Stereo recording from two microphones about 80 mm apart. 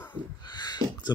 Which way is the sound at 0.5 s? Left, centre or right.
Left.